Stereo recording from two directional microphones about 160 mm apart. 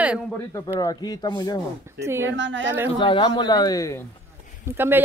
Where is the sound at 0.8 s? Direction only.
25° left (ahead or behind).